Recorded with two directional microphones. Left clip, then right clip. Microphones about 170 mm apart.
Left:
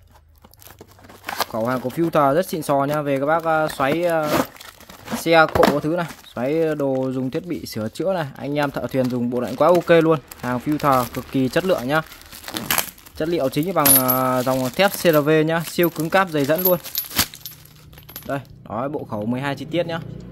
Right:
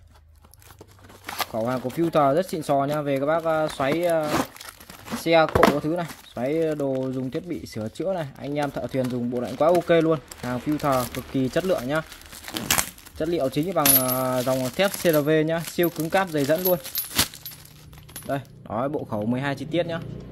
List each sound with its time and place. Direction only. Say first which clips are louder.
1.2 s a sound: left 5 dB; 15° left (ahead or behind)
1.5 s speech: left 2 dB; 25° left (ahead or behind)
12.4 s crumpling: left 2 dB; 5° left (ahead or behind)
13.2 s speech: left 3 dB; 25° left (ahead or behind)
18.2 s speech: left 2 dB; 10° left (ahead or behind)